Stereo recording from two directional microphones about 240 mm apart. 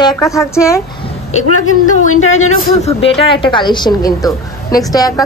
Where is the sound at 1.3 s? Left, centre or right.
Left.